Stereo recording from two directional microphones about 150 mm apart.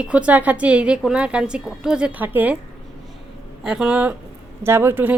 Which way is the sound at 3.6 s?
5° right (ahead or behind).